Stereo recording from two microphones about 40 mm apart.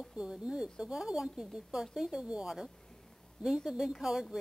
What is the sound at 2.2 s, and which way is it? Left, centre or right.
Speech, right.